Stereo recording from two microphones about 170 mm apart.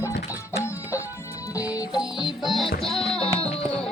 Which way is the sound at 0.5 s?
15° left (ahead or behind).